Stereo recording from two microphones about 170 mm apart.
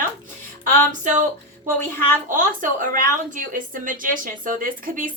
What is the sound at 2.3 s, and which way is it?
A woman's voice, 50° right (ahead or behind).